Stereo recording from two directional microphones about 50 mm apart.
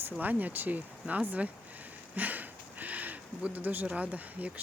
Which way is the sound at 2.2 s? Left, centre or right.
Right.